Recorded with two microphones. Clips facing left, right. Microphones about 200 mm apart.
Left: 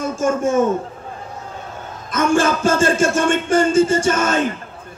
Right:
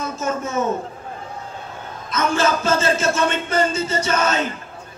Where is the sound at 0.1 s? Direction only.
50° left (ahead or behind).